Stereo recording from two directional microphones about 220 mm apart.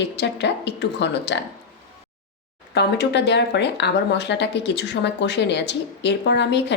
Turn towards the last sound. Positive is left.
turn(degrees=50)  # may be behind; listen again after turning